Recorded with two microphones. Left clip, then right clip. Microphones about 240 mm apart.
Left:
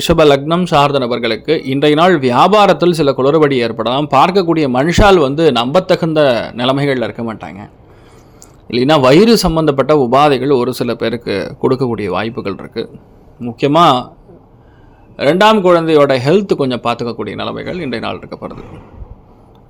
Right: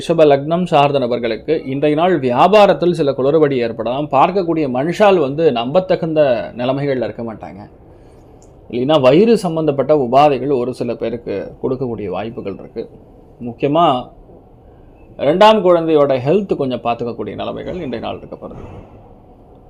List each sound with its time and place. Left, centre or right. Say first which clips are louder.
0.0 s a man's voice: left 2 dB; centre
8.7 s a man's voice: left 2 dB; left
15.1 s a man's voice: even; centre